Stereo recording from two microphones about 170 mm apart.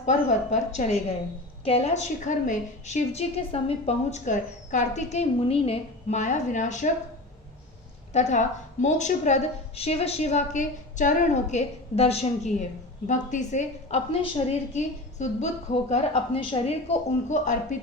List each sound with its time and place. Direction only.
0.0 s a woman's voice: 45° left (ahead or behind)
8.1 s a woman's voice: 45° left (ahead or behind)